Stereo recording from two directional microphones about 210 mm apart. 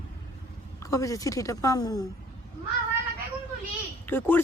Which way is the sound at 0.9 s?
15° left (ahead or behind).